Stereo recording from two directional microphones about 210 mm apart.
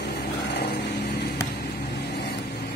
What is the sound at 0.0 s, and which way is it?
Vehicle, 55° left (ahead or behind).